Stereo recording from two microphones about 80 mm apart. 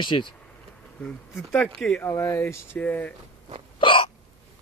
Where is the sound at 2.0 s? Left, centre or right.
Left.